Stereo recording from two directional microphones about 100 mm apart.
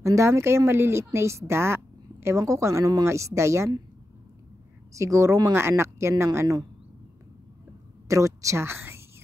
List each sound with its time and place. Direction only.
0.0 s speech: 30° right (ahead or behind)
4.9 s speech: 30° right (ahead or behind)
8.1 s a woman's voice: 30° right (ahead or behind)